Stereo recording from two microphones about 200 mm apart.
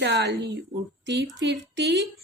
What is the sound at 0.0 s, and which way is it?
Speech, 60° right (ahead or behind).